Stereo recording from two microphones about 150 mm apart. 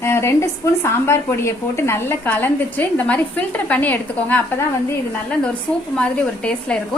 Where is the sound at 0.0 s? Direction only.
15° left (ahead or behind).